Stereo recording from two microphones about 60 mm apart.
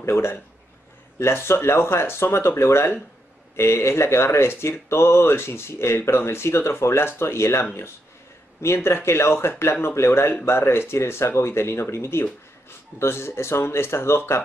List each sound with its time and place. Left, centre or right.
0.0 s speech: left
8.6 s speech: left